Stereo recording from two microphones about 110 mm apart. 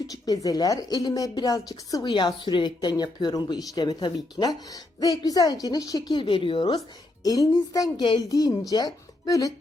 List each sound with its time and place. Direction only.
0.1 s speech: 35° left (ahead or behind)
2.0 s speech: 45° left (ahead or behind)
7.3 s speech: 35° left (ahead or behind)